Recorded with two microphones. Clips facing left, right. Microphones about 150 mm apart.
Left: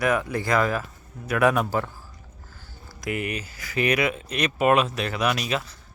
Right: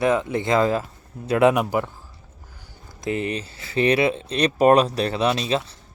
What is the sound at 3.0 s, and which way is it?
Speech, 30° right (ahead or behind).